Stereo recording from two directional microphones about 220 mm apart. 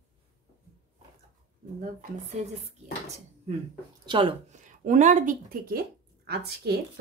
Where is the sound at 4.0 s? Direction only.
20° right (ahead or behind).